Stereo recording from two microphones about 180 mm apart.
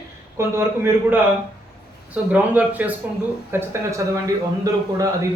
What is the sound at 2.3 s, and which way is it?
A man's voice, 10° right (ahead or behind).